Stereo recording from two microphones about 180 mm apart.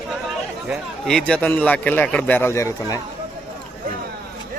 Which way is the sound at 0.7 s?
5° left (ahead or behind).